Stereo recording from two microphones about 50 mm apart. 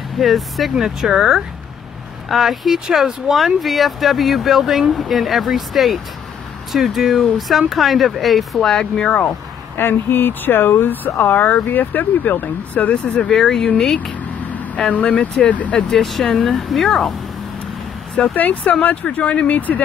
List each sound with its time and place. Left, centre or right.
0.2 s speech: centre
8.6 s speech: centre
9.8 s speech: left
11.7 s speech: left
13.2 s speech: centre
14.9 s speech: left
15.9 s speech: centre
18.3 s speech: left